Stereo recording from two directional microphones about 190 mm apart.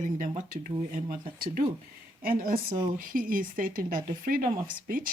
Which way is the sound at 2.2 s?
45° right (ahead or behind).